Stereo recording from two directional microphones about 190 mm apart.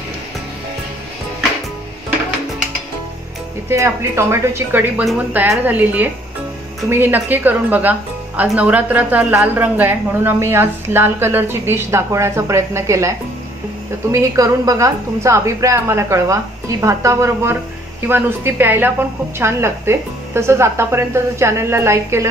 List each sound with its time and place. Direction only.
3.6 s a woman's voice: 15° right (ahead or behind)